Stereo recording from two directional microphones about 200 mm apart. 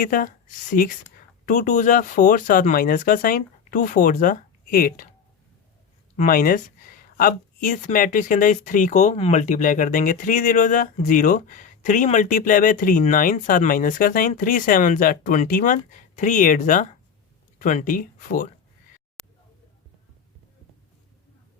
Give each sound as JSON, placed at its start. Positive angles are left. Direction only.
{"t": 0.0, "sound": "speech", "side_deg": 45}
{"t": 6.1, "sound": "speech", "side_deg": 45}